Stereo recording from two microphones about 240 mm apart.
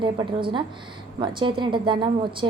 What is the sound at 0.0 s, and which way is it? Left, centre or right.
A woman's voice, centre.